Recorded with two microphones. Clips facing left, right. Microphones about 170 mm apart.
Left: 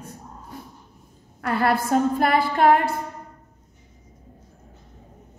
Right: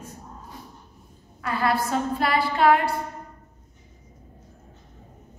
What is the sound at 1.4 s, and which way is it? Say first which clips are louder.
A woman's voice: left 3 dB; 55° left (ahead or behind).